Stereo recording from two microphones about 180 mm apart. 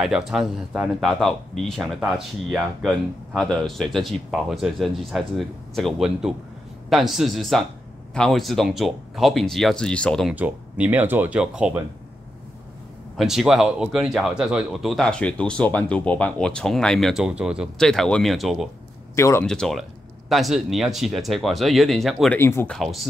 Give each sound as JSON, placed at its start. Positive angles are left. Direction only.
{"t": 0.0, "sound": "speech", "side_deg": 0}
{"t": 10.3, "sound": "speech", "side_deg": -10}
{"t": 13.2, "sound": "speech", "side_deg": 0}
{"t": 19.1, "sound": "speech", "side_deg": 15}
{"t": 19.4, "sound": "speech", "side_deg": 5}
{"t": 22.4, "sound": "speech", "side_deg": 15}
{"t": 22.8, "sound": "speech", "side_deg": 0}